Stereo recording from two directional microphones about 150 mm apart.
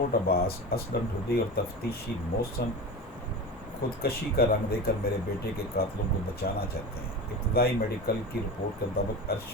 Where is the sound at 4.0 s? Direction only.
90° left.